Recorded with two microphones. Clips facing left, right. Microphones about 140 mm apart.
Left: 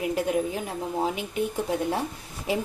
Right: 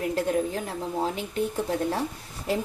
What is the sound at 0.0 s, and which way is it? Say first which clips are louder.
Speech: even; 10° left (ahead or behind).